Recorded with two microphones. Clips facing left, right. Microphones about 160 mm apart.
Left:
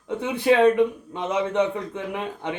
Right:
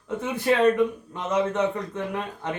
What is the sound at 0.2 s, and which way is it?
A man's voice, 15° left (ahead or behind).